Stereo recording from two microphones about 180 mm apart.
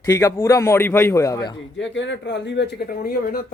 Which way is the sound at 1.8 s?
85° left.